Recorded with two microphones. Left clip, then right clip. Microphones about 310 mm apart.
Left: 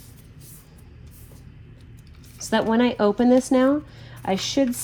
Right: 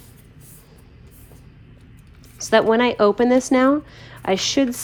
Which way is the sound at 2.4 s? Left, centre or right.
Right.